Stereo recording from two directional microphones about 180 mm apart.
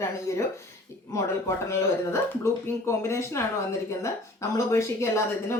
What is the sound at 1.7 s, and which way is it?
A woman's voice, 15° left (ahead or behind).